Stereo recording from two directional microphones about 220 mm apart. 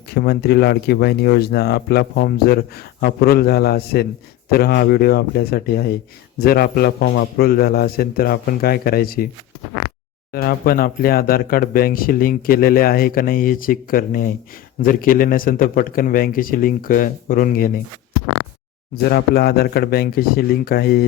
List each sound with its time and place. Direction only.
0.1 s a man's voice: 50° left (ahead or behind)
10.3 s speech: 40° left (ahead or behind)
19.0 s a man's voice: 45° left (ahead or behind)